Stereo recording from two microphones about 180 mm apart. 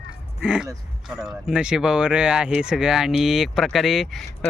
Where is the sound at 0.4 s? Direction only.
5° right (ahead or behind).